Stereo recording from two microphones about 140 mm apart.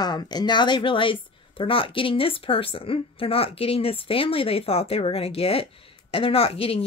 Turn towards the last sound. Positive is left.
turn(degrees=45)  # may be behind; listen again after turning